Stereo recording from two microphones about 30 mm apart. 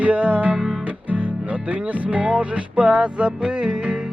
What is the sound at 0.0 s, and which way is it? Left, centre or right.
Music, right.